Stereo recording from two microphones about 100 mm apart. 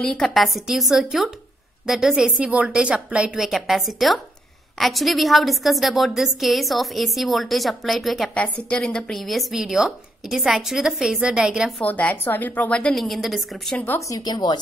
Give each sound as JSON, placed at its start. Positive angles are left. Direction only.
{"t": 0.0, "sound": "a woman's voice", "side_deg": 5}
{"t": 8.4, "sound": "a woman's voice", "side_deg": 10}
{"t": 11.8, "sound": "a woman's voice", "side_deg": 15}
{"t": 13.9, "sound": "speech", "side_deg": 35}